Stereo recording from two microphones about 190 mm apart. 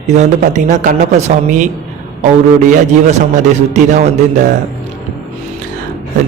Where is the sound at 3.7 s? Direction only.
40° right (ahead or behind).